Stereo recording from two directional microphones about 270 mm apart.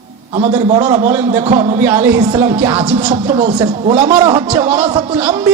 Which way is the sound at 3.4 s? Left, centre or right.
Centre.